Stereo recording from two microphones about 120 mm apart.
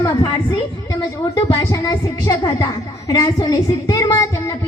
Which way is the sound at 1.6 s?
35° left (ahead or behind).